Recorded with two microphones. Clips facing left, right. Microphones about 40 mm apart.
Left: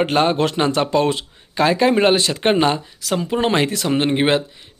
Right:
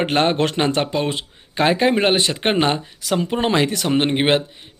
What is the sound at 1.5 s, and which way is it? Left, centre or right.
A man's voice, right.